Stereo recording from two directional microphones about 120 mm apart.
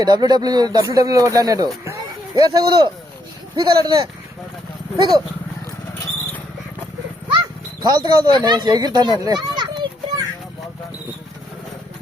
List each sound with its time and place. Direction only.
0.0 s speech: 35° right (ahead or behind)
7.3 s speech: 40° right (ahead or behind)